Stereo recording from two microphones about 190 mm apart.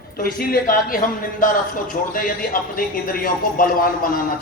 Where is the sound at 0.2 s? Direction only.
50° left (ahead or behind).